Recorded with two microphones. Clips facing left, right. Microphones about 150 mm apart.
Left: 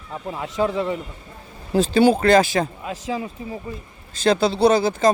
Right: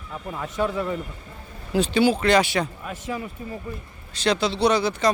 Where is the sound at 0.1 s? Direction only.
15° left (ahead or behind).